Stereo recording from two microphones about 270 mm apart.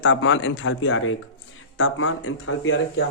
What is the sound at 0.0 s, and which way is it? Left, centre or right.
Speech, left.